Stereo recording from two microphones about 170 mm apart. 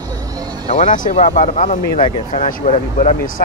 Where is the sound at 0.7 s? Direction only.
45° left (ahead or behind).